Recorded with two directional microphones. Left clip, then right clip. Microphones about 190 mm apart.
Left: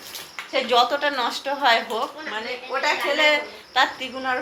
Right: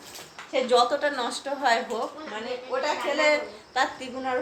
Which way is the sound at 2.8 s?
Centre (ahead or behind).